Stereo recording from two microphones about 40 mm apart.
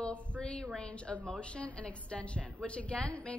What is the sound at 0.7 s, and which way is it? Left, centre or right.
A woman's voice, left.